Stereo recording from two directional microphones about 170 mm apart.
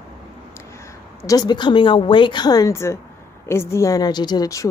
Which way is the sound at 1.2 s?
20° left (ahead or behind).